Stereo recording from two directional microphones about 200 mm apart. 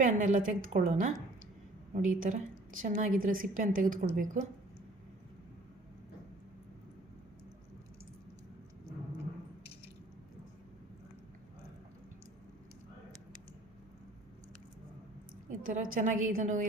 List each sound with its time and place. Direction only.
0.0 s a woman's voice: 40° right (ahead or behind)
2.1 s a woman's voice: 40° right (ahead or behind)
15.4 s a woman's voice: 40° right (ahead or behind)